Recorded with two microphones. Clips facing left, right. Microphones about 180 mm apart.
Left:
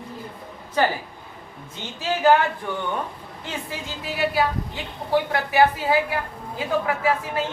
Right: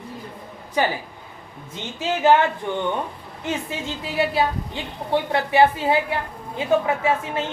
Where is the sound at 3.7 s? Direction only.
25° right (ahead or behind).